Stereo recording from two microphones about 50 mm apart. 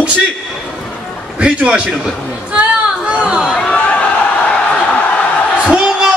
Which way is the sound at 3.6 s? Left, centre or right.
Left.